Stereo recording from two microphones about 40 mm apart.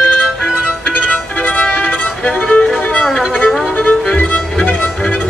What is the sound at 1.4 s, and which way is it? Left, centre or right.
Violin, left.